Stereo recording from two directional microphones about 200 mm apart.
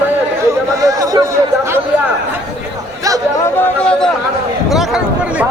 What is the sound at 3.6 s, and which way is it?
Chatter, 5° left (ahead or behind).